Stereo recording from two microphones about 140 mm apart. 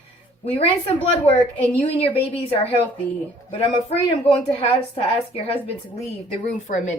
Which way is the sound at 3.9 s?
45° left (ahead or behind).